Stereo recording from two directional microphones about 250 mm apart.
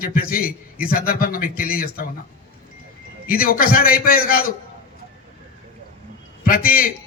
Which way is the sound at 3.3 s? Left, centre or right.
Left.